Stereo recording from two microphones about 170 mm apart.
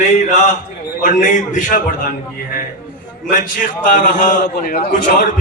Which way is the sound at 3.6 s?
50° left (ahead or behind).